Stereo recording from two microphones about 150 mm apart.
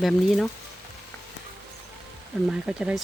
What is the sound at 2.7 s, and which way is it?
Speech, 5° right (ahead or behind).